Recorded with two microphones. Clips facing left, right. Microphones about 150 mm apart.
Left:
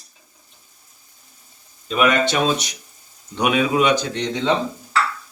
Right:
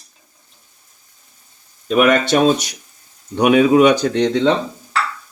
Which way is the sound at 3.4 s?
40° right (ahead or behind).